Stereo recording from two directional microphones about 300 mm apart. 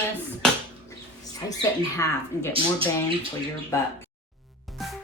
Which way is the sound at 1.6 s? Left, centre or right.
Centre.